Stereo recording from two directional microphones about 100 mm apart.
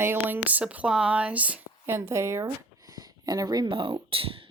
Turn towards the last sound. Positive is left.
turn(degrees=-65)  # may be behind; listen again after turning